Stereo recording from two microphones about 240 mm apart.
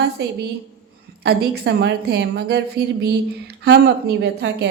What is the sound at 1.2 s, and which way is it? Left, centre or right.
A woman's voice, right.